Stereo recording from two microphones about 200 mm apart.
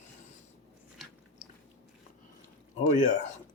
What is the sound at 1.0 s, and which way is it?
Biting, centre (ahead or behind).